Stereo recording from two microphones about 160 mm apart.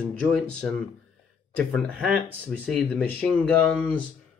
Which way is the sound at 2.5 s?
5° left (ahead or behind).